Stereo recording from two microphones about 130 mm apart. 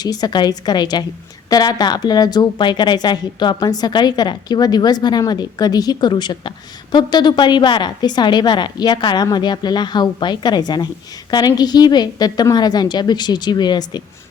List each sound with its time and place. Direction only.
0.0 s speech: 30° left (ahead or behind)